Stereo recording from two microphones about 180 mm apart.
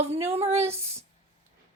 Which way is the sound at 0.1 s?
35° right (ahead or behind).